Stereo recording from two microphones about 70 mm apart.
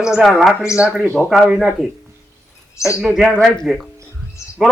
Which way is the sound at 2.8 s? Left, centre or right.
Left.